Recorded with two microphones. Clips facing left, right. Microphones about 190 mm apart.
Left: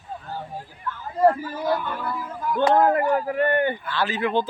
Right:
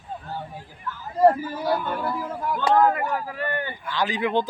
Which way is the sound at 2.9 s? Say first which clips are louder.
Left 7 dB; 55° left (ahead or behind).